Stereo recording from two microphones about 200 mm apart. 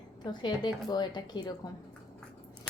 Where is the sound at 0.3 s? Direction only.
20° left (ahead or behind).